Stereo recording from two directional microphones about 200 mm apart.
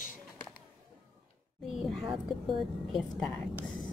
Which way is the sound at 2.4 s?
Centre (ahead or behind).